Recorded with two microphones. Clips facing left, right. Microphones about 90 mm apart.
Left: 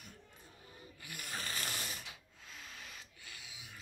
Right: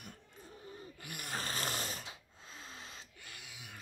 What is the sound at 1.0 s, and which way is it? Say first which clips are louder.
Snoring: right 3 dB; 45° right (ahead or behind).